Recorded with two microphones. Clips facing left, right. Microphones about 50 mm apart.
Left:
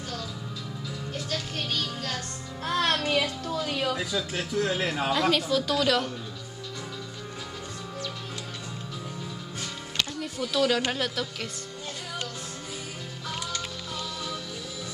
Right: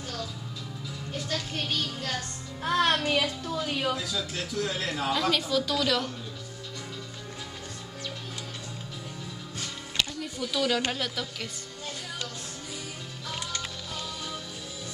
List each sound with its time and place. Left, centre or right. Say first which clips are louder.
1.5 s music: even; centre
3.2 s music: left 1 dB; centre
3.5 s a woman's voice: left 1 dB; centre
3.9 s a man's voice: left 2 dB; centre
5.1 s music: left 2 dB; centre
10.2 s speech: left 6 dB; centre
10.9 s music: left 3 dB; centre